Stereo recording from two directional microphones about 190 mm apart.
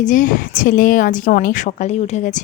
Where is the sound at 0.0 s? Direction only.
45° left (ahead or behind).